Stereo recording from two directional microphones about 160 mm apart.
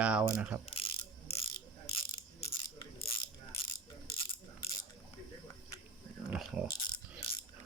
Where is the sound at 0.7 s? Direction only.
35° left (ahead or behind).